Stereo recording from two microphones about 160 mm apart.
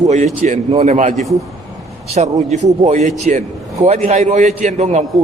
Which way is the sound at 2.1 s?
45° right (ahead or behind).